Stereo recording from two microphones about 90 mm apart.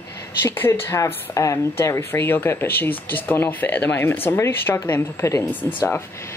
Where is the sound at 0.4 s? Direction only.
25° left (ahead or behind).